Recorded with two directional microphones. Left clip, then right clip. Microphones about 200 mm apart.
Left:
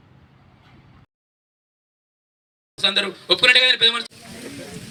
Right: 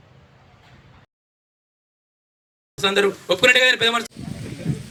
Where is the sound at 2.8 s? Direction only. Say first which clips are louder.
Right 2 dB; 55° right (ahead or behind).